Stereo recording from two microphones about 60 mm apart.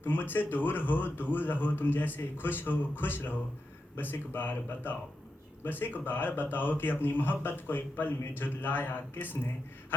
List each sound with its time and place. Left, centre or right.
0.0 s a man's voice: left